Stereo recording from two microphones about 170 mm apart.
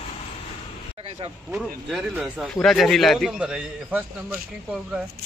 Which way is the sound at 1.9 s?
5° right (ahead or behind).